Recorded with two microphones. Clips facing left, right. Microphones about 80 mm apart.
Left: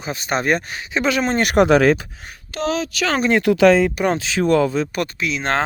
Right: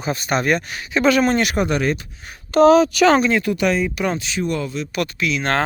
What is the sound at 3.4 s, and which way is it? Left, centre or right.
Speech, left.